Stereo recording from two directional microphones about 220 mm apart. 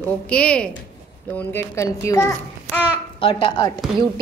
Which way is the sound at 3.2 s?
25° left (ahead or behind).